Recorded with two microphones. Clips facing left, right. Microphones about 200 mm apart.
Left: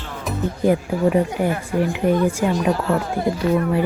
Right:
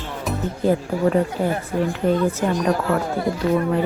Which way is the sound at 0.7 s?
15° left (ahead or behind).